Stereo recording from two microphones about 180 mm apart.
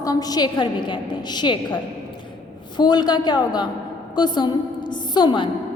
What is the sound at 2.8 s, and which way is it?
A woman's voice, 25° left (ahead or behind).